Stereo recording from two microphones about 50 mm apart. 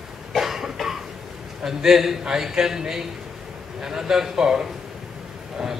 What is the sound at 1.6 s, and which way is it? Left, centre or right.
A man's voice, centre.